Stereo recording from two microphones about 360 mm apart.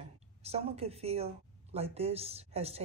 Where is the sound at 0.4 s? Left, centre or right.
Centre.